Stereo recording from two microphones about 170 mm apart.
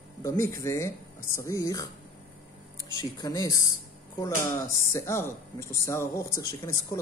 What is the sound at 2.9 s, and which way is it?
Speech, 20° left (ahead or behind).